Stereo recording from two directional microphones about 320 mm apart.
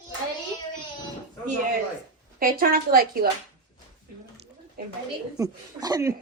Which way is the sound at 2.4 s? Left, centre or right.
Right.